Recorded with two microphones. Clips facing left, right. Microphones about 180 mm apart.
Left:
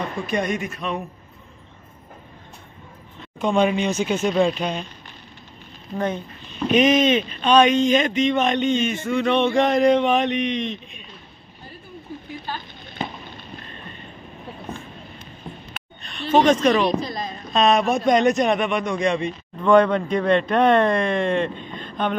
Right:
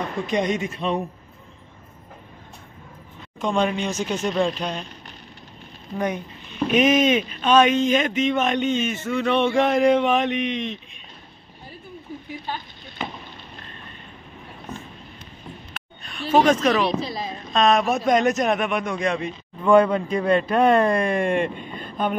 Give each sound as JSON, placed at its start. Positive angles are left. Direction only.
{"t": 0.3, "sound": "speech", "side_deg": -20}
{"t": 3.3, "sound": "speech", "side_deg": 5}
{"t": 5.9, "sound": "speech", "side_deg": -15}
{"t": 15.7, "sound": "a sound", "side_deg": -5}
{"t": 17.0, "sound": "speech", "side_deg": -5}